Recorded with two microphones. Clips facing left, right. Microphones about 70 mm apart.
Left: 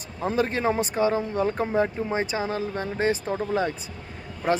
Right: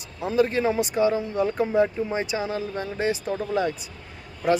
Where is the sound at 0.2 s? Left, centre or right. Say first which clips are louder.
Right 3 dB; left.